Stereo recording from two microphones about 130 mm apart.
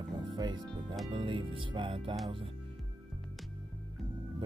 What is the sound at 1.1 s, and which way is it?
Speech, 40° right (ahead or behind).